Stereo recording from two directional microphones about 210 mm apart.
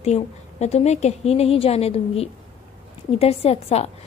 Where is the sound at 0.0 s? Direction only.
30° left (ahead or behind).